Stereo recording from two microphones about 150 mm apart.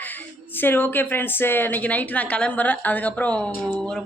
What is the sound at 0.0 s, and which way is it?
Speech, 10° left (ahead or behind).